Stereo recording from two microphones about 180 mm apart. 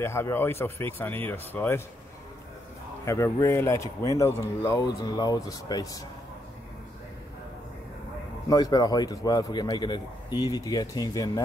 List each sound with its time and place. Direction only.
0.0 s speech: 15° left (ahead or behind)
3.1 s a man's voice: 15° left (ahead or behind)
8.5 s a man's voice: 20° left (ahead or behind)